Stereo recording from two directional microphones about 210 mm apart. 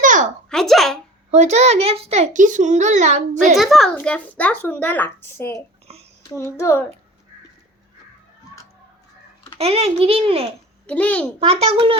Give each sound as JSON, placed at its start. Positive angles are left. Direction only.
{"t": 0.0, "sound": "a sound", "side_deg": -40}
{"t": 0.5, "sound": "speech", "side_deg": 0}
{"t": 1.3, "sound": "a child's voice", "side_deg": -30}
{"t": 3.4, "sound": "a child's voice", "side_deg": 0}
{"t": 5.5, "sound": "a sound", "side_deg": -30}
{"t": 6.2, "sound": "a child's voice", "side_deg": 15}
{"t": 9.6, "sound": "a child's voice", "side_deg": -30}
{"t": 10.8, "sound": "a child's voice", "side_deg": 5}
{"t": 11.3, "sound": "a child's voice", "side_deg": -30}